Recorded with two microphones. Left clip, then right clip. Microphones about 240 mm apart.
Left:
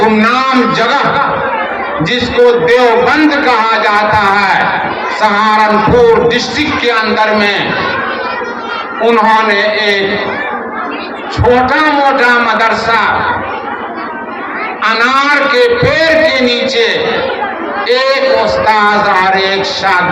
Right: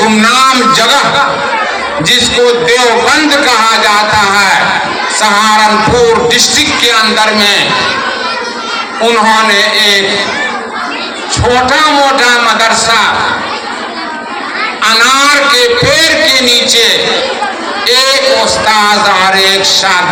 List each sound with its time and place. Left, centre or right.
0.0 s speech: right
2.0 s a man's voice: right
9.0 s a man's voice: right
11.5 s a man's voice: right
14.8 s a man's voice: right